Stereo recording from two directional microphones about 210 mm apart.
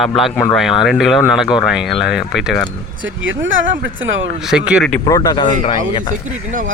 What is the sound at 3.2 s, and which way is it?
Speech, 65° right (ahead or behind).